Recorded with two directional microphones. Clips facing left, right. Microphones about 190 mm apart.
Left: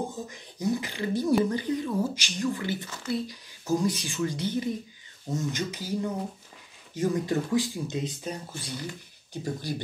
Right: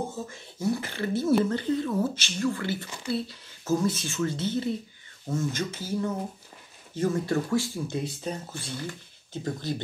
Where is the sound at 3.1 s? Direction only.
15° left (ahead or behind).